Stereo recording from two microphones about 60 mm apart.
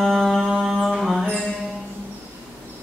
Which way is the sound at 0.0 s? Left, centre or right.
Centre.